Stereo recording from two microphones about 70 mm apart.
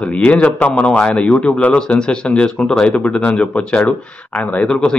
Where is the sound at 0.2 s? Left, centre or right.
Centre.